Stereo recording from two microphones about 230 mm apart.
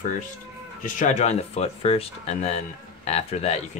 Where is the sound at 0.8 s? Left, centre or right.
Left.